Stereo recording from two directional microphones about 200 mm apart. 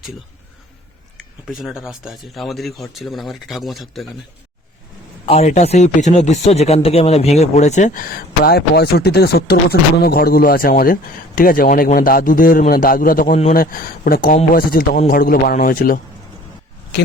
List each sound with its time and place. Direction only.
1.5 s speech: centre (ahead or behind)
5.2 s a man's voice: 30° left (ahead or behind)